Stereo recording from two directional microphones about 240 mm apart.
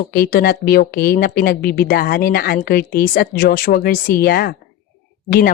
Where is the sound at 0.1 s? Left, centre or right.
Left.